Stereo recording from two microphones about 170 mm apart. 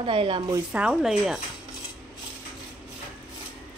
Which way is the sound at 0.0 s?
30° right (ahead or behind).